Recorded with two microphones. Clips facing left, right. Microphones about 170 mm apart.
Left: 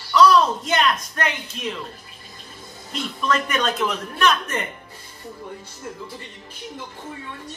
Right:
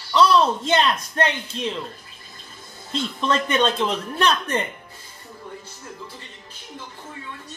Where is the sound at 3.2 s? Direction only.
30° right (ahead or behind).